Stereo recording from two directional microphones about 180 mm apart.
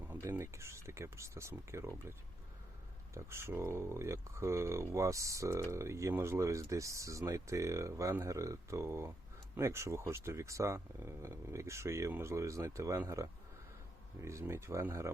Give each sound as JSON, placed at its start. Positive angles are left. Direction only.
{"t": 0.1, "sound": "speech", "side_deg": -15}
{"t": 3.2, "sound": "speech", "side_deg": -15}